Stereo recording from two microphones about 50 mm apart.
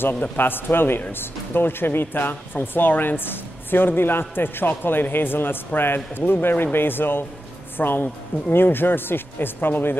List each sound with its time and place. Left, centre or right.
0.0 s speech: left